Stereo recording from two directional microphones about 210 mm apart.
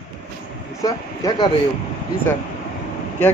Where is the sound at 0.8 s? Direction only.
20° left (ahead or behind).